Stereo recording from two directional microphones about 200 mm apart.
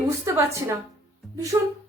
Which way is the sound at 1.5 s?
15° right (ahead or behind).